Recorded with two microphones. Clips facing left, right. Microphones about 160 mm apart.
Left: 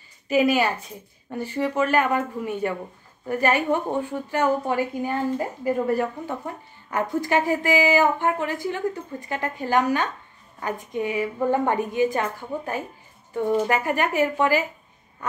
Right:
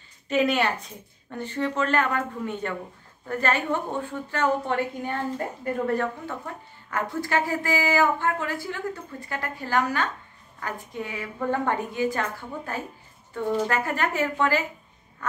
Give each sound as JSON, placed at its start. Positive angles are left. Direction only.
{"t": 0.3, "sound": "a woman's voice", "side_deg": 5}